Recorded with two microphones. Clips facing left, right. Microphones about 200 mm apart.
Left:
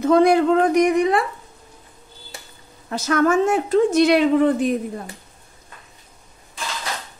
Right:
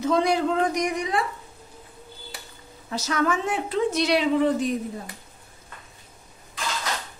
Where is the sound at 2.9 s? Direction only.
55° left (ahead or behind).